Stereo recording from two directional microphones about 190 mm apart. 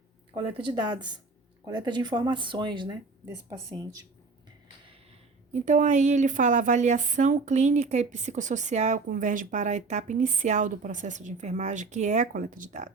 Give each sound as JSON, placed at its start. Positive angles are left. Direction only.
{"t": 0.6, "sound": "speech", "side_deg": -25}
{"t": 5.5, "sound": "a woman's voice", "side_deg": -40}